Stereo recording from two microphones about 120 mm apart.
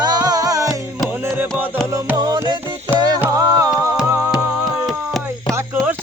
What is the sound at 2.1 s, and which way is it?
Music, 35° right (ahead or behind).